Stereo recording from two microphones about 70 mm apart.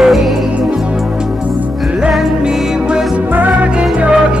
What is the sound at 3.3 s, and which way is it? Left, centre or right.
Music, right.